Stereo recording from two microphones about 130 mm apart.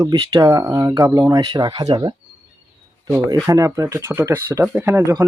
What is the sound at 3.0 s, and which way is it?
Speech, 25° right (ahead or behind).